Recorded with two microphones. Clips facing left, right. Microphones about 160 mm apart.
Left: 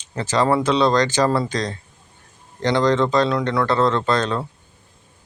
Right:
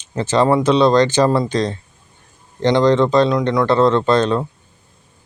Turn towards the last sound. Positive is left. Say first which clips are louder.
# right 5 dB
turn(degrees=-20)  # may be behind; listen again after turning